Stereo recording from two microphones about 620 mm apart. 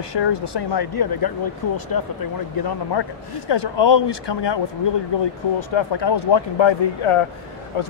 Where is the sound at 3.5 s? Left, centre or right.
Left.